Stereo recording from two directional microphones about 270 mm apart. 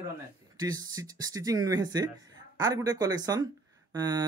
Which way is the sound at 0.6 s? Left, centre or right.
Centre.